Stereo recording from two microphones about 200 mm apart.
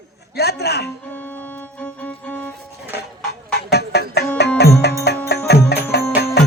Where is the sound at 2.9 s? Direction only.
55° left (ahead or behind).